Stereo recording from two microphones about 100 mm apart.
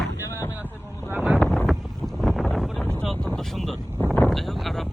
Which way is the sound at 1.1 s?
10° right (ahead or behind).